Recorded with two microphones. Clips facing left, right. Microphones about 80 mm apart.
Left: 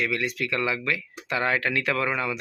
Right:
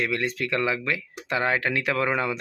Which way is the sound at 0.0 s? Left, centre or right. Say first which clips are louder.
Right 1 dB; right.